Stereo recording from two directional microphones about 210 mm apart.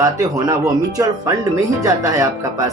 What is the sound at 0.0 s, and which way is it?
Speech, 15° right (ahead or behind).